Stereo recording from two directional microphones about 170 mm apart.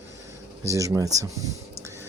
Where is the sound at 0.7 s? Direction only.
20° right (ahead or behind).